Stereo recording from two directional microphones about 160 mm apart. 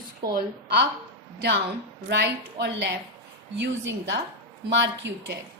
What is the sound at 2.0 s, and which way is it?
Speech, 90° right.